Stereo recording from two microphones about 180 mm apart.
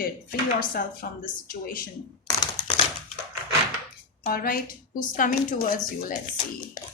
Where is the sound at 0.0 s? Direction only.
55° left (ahead or behind).